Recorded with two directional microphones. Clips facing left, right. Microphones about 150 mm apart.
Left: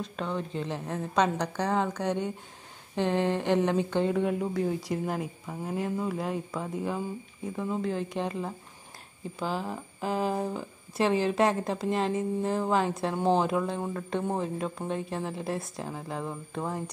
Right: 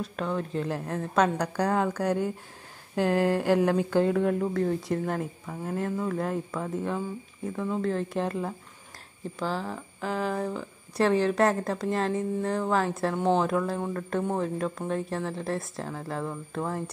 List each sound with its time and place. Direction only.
0.0 s a woman's voice: centre (ahead or behind)
9.4 s a sound: 15° left (ahead or behind)
11.0 s speech: 5° left (ahead or behind)